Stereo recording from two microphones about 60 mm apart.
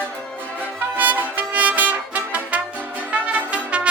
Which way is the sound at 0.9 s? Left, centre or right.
Right.